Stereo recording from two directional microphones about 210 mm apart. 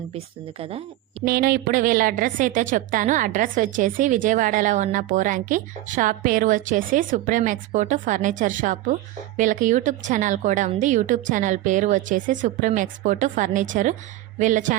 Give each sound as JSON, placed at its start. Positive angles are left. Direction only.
{"t": 1.2, "sound": "a woman's voice", "side_deg": -45}